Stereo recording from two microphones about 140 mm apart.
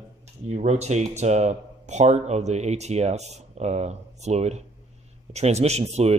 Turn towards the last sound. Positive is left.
turn(degrees=-50)  # may be behind; listen again after turning